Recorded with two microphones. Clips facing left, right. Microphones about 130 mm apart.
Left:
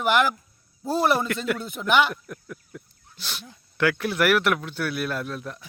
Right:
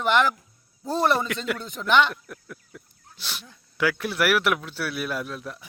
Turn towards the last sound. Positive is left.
turn(degrees=-5)  # may be behind; listen again after turning